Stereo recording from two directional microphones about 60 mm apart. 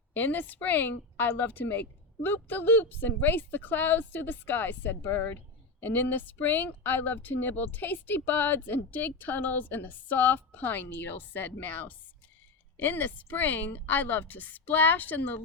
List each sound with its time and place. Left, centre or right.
0.1 s speech: left